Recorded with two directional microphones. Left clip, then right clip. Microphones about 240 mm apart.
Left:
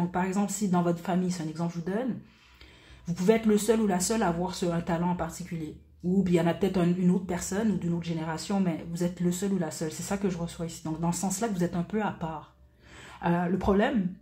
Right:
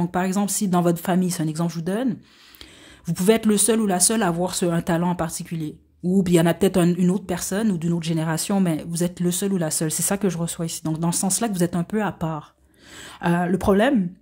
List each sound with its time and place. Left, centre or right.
0.1 s speech: right
3.2 s speech: right